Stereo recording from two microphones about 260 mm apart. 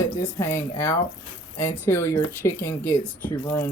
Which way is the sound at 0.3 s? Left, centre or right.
Centre.